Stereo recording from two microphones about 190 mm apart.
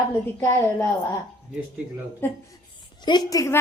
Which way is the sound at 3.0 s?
20° left (ahead or behind).